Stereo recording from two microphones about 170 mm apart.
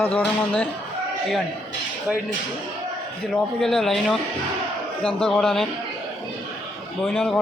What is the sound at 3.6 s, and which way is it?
A man's voice, centre (ahead or behind).